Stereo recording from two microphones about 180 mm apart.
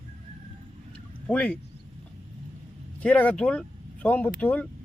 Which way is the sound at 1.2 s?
5° left (ahead or behind).